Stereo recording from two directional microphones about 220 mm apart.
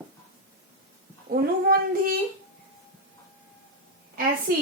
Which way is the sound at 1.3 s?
40° right (ahead or behind).